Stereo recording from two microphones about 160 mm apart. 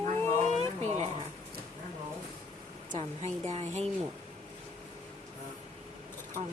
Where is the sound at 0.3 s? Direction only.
45° right (ahead or behind).